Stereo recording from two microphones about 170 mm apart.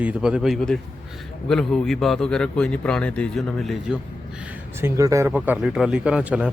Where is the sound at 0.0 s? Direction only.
5° right (ahead or behind).